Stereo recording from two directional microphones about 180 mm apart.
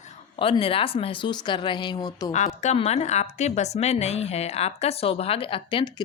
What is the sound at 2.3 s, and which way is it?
A woman's voice, 40° left (ahead or behind).